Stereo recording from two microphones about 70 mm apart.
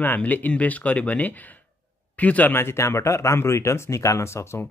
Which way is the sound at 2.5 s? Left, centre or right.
Left.